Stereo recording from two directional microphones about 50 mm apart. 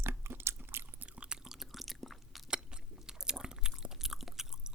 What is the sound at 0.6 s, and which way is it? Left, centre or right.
Chewing, right.